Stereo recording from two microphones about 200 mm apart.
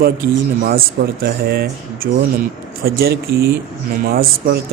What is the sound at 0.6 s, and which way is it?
Speech, 50° right (ahead or behind).